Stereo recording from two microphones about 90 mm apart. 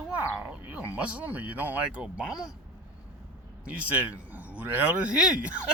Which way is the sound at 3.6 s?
15° right (ahead or behind).